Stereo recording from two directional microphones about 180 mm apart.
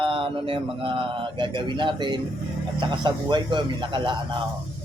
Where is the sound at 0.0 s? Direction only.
30° right (ahead or behind).